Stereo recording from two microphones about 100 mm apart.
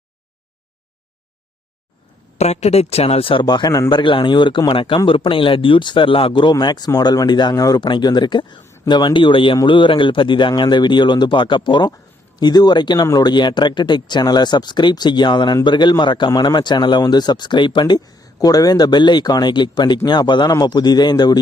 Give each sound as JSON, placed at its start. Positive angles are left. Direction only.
{"t": 2.4, "sound": "speech", "side_deg": 90}
{"t": 3.4, "sound": "speech", "side_deg": 45}
{"t": 7.9, "sound": "speech", "side_deg": 50}
{"t": 8.6, "sound": "a sound", "side_deg": 25}
{"t": 8.9, "sound": "speech", "side_deg": 50}